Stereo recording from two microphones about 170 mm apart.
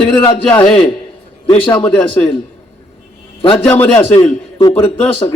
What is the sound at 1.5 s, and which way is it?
Speech, 30° left (ahead or behind).